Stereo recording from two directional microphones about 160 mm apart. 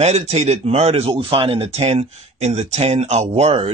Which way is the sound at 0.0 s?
45° right (ahead or behind).